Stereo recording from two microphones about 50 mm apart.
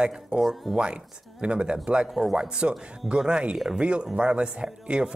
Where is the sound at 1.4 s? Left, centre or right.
Centre.